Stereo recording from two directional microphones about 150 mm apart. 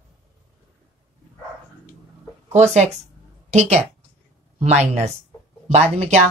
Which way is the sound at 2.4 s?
45° right (ahead or behind).